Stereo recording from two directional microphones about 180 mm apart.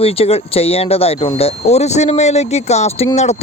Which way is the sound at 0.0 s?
35° left (ahead or behind).